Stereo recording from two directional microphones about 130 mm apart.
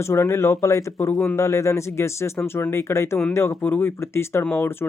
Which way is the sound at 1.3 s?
25° left (ahead or behind).